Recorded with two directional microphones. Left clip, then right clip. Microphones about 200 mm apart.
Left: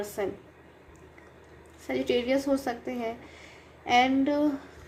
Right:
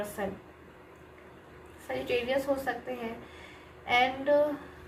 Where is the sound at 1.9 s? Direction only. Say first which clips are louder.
Left 4 dB; 45° left (ahead or behind).